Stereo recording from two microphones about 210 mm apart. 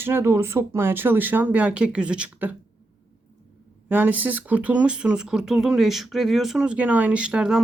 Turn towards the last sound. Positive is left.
turn(degrees=-5)  # may be behind; listen again after turning